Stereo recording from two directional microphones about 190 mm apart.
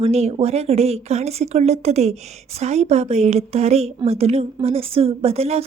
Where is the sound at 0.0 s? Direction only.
35° right (ahead or behind).